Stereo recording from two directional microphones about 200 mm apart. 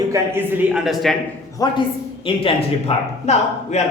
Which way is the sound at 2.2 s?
30° left (ahead or behind).